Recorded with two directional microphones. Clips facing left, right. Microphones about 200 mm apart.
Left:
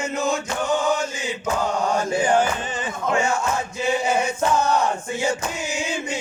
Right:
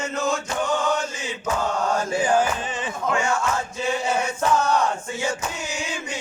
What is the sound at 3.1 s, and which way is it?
Speech, 25° left (ahead or behind).